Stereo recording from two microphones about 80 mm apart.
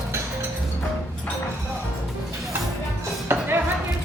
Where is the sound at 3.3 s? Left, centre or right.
Right.